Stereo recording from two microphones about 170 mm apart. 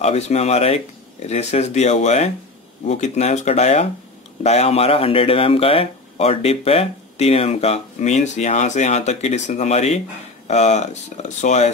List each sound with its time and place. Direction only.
0.0 s speech: 40° left (ahead or behind)